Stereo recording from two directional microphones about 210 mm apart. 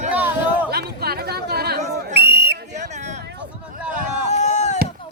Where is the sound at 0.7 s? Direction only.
50° right (ahead or behind).